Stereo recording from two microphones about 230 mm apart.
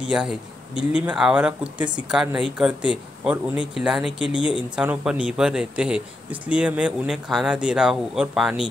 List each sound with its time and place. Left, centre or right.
0.1 s speech: centre
4.4 s speech: left
4.7 s speech: centre